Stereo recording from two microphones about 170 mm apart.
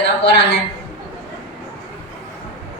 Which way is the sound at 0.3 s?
90° left.